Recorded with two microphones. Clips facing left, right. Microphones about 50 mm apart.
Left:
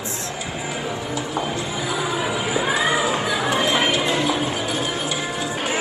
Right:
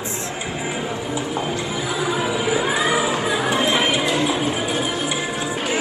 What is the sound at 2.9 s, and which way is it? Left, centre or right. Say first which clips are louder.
Music: right 1 dB; right.